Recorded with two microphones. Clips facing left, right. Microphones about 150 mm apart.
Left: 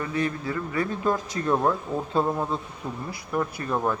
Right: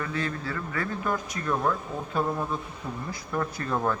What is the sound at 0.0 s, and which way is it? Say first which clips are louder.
A man's voice: left 4 dB; 20° left (ahead or behind).